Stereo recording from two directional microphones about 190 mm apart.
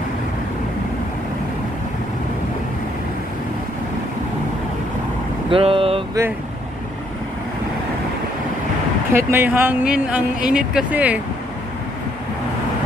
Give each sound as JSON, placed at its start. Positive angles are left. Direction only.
{"t": 5.5, "sound": "vehicle", "side_deg": -30}
{"t": 9.1, "sound": "speech", "side_deg": -10}